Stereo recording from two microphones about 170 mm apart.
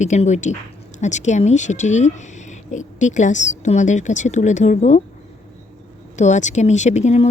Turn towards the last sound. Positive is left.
turn(degrees=40)  # may be behind; listen again after turning